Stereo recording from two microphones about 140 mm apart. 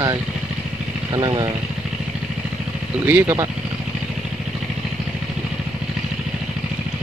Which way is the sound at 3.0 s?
15° right (ahead or behind).